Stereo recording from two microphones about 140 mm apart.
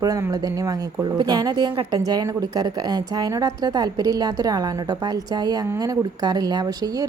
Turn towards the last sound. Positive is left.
turn(degrees=-25)  # may be behind; listen again after turning